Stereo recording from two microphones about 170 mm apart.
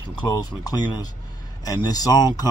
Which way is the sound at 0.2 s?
25° left (ahead or behind).